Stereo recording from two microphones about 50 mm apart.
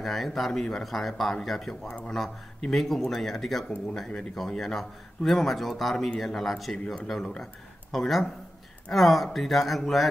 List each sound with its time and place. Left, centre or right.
0.0 s a man's voice: centre
0.5 s speech: centre
0.7 s a man's voice: centre
1.9 s speech: centre
2.1 s a man's voice: centre